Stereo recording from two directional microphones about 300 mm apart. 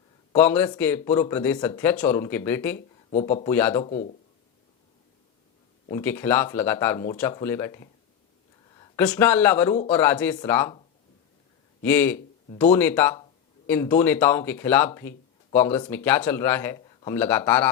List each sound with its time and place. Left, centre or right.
0.3 s speech: centre
3.8 s speech: left
5.9 s speech: centre
11.8 s speech: centre